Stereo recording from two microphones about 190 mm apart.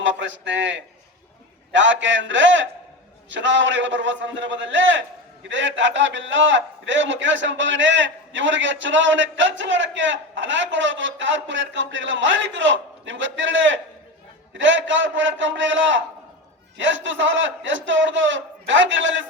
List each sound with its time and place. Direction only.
0.0 s a man's voice: 75° right (ahead or behind)